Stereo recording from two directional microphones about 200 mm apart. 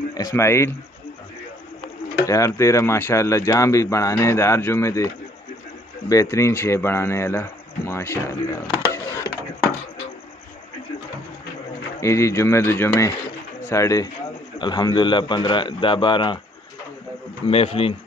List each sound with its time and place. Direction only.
0.1 s speech: 15° left (ahead or behind)
2.2 s speech: 15° left (ahead or behind)
8.7 s a sound: 15° left (ahead or behind)
12.0 s a man's voice: 15° left (ahead or behind)
17.5 s a man's voice: 30° left (ahead or behind)